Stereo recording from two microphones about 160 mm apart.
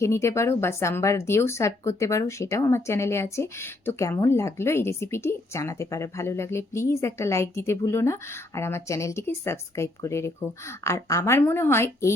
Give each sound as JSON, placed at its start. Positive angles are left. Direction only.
{"t": 0.0, "sound": "speech", "side_deg": 20}